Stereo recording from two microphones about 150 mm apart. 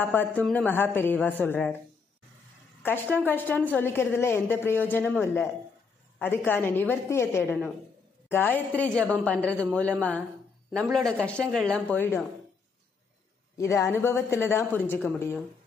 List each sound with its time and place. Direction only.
0.0 s a woman's voice: 10° left (ahead or behind)
2.8 s a woman's voice: 15° left (ahead or behind)
13.6 s a woman's voice: 20° left (ahead or behind)